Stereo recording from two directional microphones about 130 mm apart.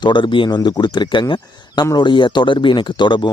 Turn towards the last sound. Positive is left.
turn(degrees=35)  # may be behind; listen again after turning